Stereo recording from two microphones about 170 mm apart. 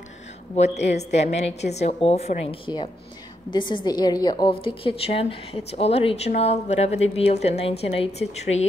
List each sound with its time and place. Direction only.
0.8 s a woman's voice: 40° left (ahead or behind)